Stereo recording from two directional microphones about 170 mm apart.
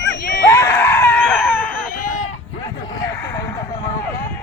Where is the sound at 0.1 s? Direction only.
75° left (ahead or behind).